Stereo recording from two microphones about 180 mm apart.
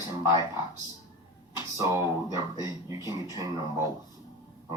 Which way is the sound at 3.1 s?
20° right (ahead or behind).